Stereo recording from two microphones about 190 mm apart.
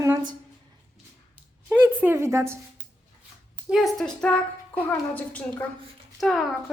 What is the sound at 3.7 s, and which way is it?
A woman's voice, centre (ahead or behind).